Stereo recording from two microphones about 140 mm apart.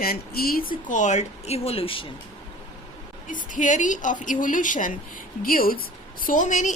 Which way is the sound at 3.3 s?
65° left (ahead or behind).